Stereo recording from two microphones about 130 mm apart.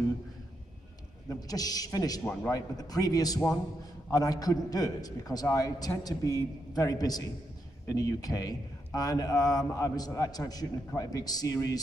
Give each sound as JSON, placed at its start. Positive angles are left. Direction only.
{"t": 1.3, "sound": "a man's voice", "side_deg": 30}